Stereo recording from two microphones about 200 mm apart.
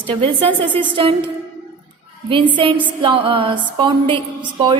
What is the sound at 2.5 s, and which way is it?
A woman's voice, 25° right (ahead or behind).